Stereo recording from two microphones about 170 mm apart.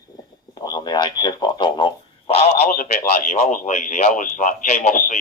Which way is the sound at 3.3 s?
40° left (ahead or behind).